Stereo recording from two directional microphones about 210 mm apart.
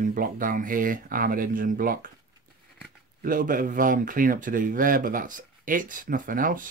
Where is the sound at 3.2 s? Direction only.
40° right (ahead or behind).